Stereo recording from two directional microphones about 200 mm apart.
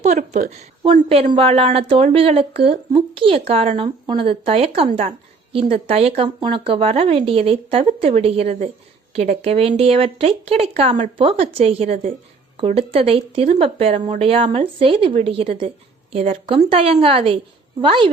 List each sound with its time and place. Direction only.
0.0 s a woman's voice: 35° right (ahead or behind)